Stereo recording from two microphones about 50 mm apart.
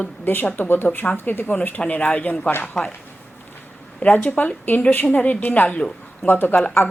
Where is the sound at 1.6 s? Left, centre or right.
Left.